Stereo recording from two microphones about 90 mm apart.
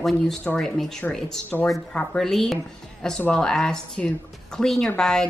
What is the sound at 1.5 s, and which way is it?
Speech, 25° left (ahead or behind).